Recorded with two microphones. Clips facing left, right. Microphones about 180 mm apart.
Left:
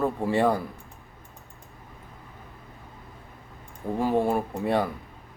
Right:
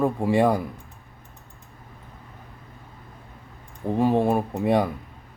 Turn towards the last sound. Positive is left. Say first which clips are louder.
# right 4 dB
turn(degrees=-15)  # may be behind; listen again after turning